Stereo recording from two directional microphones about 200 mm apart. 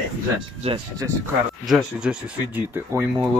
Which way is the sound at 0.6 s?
30° right (ahead or behind).